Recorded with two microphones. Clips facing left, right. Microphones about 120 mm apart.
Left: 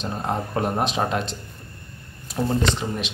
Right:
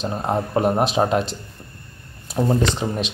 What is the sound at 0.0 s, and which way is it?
Speech, 20° right (ahead or behind).